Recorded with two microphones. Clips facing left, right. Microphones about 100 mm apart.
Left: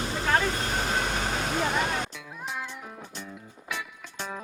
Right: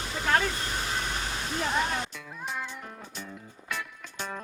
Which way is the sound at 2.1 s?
5° left (ahead or behind).